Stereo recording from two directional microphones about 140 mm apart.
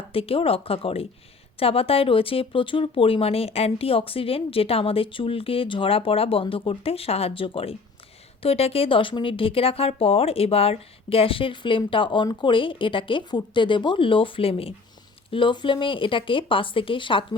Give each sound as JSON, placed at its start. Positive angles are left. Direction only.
{"t": 0.1, "sound": "speech", "side_deg": 40}